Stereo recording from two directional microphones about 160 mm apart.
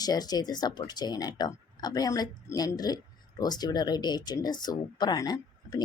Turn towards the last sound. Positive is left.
turn(degrees=25)  # may be behind; listen again after turning